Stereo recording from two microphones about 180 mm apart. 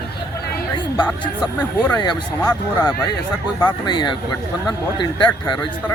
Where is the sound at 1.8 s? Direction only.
20° left (ahead or behind).